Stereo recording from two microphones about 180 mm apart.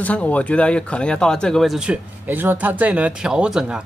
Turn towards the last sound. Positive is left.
turn(degrees=-5)  # may be behind; listen again after turning